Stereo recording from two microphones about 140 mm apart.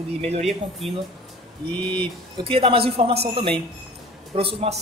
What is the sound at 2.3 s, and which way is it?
A man's voice, 40° right (ahead or behind).